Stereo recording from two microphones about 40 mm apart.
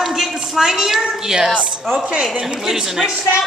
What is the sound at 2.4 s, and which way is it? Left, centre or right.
Speech, centre.